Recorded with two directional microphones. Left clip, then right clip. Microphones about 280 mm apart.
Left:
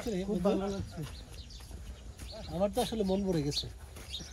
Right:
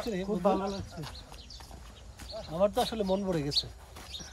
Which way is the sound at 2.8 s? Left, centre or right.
Right.